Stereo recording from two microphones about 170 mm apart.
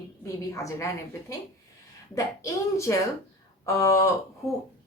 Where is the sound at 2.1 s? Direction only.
20° left (ahead or behind).